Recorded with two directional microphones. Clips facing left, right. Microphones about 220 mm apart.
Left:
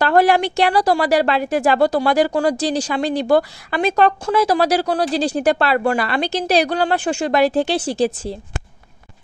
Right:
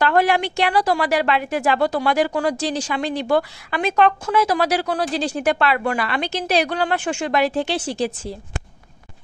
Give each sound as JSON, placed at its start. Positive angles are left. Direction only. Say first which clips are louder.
{"t": 0.0, "sound": "speech", "louder": "left 3 dB", "side_deg": 35}